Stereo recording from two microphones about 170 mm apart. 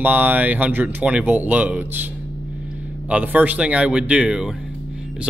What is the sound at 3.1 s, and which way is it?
Speech, 10° right (ahead or behind).